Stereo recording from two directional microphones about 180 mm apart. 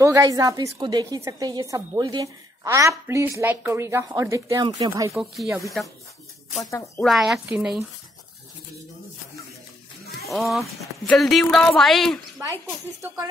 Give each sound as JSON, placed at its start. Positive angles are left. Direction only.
{"t": 0.0, "sound": "a woman's voice", "side_deg": -20}
{"t": 5.1, "sound": "speech", "side_deg": 0}
{"t": 7.0, "sound": "speech", "side_deg": 0}
{"t": 10.2, "sound": "speech", "side_deg": 0}
{"t": 12.4, "sound": "a woman's voice", "side_deg": -15}